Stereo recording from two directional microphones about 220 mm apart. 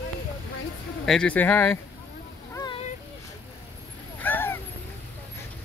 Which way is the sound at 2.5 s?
20° left (ahead or behind).